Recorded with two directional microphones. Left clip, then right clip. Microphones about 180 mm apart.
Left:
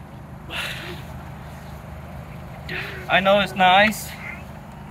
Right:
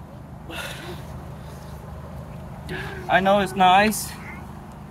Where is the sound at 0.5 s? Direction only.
50° right (ahead or behind).